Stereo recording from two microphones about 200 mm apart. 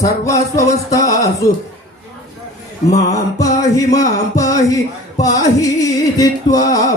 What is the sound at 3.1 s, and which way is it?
Music, 15° left (ahead or behind).